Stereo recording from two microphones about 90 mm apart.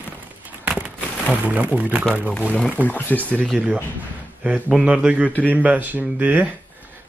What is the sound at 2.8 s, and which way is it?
Speech, 20° left (ahead or behind).